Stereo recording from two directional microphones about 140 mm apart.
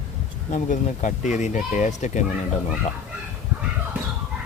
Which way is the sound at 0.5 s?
65° left (ahead or behind).